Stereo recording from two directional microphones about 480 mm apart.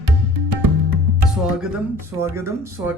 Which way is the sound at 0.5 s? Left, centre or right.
Right.